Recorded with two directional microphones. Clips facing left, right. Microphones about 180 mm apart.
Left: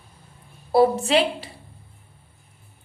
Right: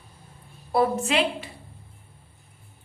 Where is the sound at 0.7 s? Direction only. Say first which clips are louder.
Left 5 dB; 30° left (ahead or behind).